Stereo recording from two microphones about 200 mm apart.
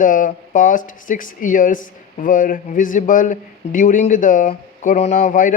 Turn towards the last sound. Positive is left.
turn(degrees=40)  # may be behind; listen again after turning